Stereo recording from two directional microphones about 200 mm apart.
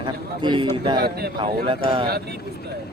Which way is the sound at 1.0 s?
50° right (ahead or behind).